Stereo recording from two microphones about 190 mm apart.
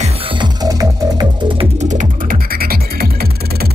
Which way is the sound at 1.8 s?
40° right (ahead or behind).